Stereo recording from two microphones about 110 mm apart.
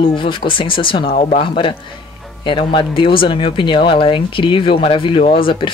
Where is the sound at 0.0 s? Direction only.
50° left (ahead or behind).